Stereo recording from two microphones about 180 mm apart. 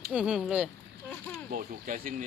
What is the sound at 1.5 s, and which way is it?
Speech, 50° right (ahead or behind).